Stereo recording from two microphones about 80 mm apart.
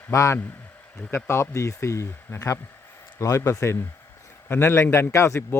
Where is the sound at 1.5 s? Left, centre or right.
Left.